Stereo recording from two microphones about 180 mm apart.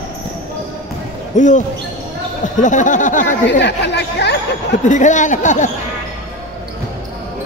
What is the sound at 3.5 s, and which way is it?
Speech, 75° left (ahead or behind).